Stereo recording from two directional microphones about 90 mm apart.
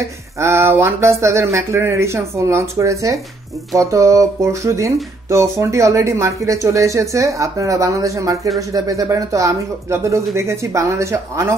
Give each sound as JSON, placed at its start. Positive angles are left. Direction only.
{"t": 0.4, "sound": "speech", "side_deg": -30}